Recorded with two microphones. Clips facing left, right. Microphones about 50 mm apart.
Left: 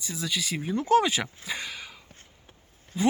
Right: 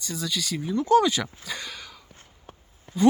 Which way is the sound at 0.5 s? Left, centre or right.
Left.